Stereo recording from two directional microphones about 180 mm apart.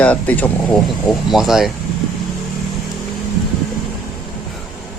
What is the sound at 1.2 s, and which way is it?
Speech, centre (ahead or behind).